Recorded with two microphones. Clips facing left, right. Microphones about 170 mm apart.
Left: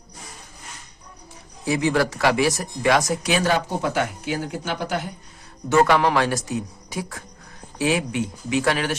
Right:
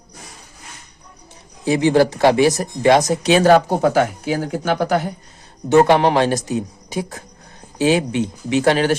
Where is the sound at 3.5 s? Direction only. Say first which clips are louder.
Right 9 dB; 65° right (ahead or behind).